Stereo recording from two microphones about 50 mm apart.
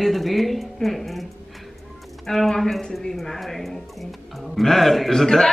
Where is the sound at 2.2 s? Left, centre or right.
Centre.